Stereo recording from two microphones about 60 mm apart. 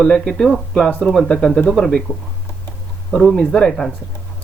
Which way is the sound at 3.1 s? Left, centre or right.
Centre.